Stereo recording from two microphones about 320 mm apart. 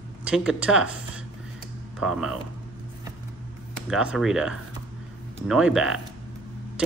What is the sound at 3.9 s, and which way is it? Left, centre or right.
A man's voice, centre.